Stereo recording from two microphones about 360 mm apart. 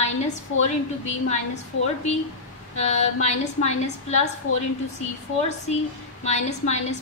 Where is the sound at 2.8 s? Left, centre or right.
Centre.